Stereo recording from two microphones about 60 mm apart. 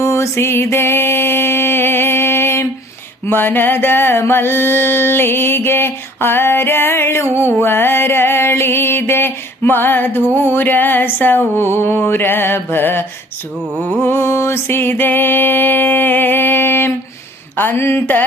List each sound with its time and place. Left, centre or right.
0.0 s mantra: left
3.2 s music: left